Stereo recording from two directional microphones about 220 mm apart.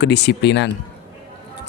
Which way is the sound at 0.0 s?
50° left (ahead or behind).